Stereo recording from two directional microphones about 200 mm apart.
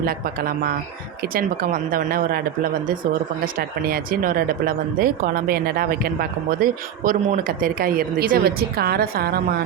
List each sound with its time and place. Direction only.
0.0 s speech: 45° right (ahead or behind)
3.4 s speech: 50° right (ahead or behind)